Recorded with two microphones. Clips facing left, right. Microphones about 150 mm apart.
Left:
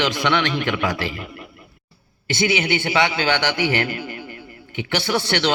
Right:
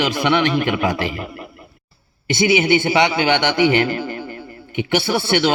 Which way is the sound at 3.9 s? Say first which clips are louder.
Right 6 dB; 45° right (ahead or behind).